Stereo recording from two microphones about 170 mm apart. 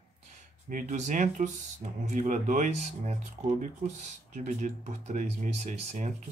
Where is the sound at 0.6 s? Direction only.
45° right (ahead or behind).